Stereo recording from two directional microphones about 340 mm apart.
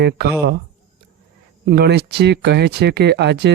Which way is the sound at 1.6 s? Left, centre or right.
Right.